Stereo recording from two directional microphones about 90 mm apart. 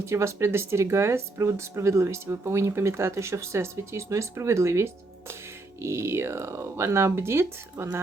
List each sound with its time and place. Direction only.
0.0 s speech: 30° right (ahead or behind)